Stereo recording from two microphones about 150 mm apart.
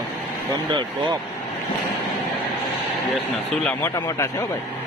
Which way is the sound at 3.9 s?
20° left (ahead or behind).